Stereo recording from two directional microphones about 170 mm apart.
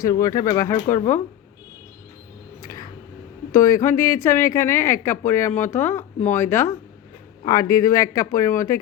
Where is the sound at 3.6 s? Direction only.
15° left (ahead or behind).